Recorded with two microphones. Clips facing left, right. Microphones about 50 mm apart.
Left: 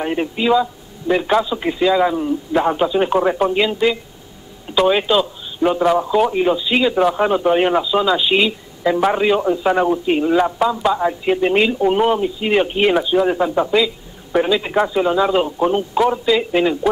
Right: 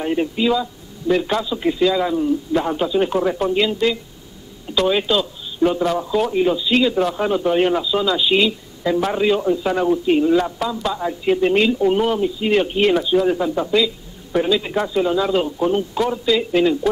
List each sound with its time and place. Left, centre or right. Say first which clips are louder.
0.0 s speech: even; left